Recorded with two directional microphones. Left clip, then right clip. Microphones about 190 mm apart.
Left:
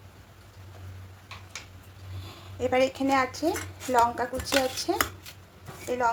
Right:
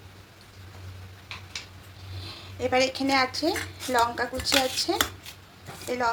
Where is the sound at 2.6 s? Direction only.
10° left (ahead or behind).